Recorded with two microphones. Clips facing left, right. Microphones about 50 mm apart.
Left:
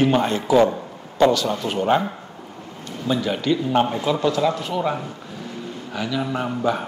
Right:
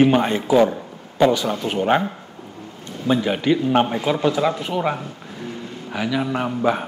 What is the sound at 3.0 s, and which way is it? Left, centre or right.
Speech, right.